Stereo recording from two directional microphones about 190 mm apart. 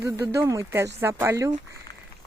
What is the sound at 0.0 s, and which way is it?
Speech, 15° right (ahead or behind).